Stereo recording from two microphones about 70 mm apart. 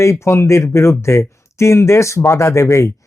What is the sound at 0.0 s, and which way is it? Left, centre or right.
Speech, left.